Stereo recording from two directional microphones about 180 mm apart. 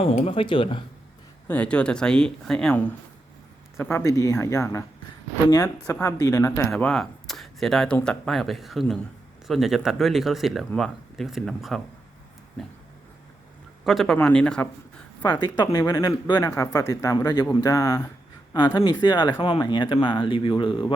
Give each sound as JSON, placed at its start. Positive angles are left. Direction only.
{"t": 0.0, "sound": "speech", "side_deg": 35}
{"t": 1.5, "sound": "speech", "side_deg": 5}
{"t": 13.8, "sound": "speech", "side_deg": 0}
{"t": 15.2, "sound": "speech", "side_deg": 25}